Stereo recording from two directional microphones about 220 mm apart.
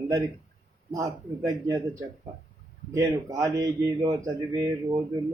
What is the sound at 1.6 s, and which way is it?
A man's voice, 15° right (ahead or behind).